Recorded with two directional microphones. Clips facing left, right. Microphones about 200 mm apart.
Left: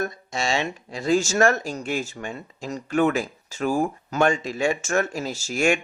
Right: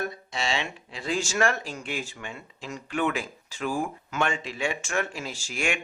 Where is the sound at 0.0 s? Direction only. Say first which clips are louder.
Left 4 dB; 45° left (ahead or behind).